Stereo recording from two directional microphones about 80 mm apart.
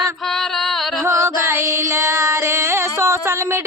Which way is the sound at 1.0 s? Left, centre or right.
Right.